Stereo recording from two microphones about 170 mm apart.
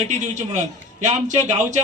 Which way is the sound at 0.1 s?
45° right (ahead or behind).